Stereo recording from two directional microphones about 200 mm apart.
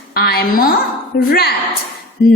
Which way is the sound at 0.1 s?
50° left (ahead or behind).